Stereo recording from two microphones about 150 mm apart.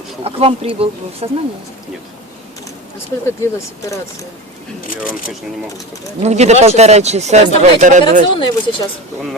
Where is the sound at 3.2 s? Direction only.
20° left (ahead or behind).